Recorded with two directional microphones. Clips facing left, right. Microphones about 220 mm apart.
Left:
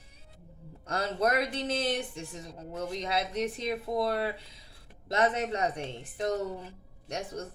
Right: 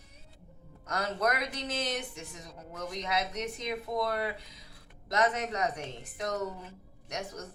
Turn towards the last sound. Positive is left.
turn(degrees=30)  # may be behind; listen again after turning